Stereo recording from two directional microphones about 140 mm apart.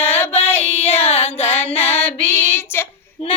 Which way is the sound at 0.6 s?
45° left (ahead or behind).